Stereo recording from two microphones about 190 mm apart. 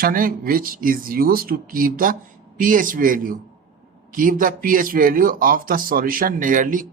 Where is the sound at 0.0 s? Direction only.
50° right (ahead or behind).